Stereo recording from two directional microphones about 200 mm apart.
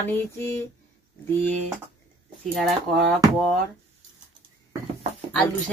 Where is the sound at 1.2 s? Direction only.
10° left (ahead or behind).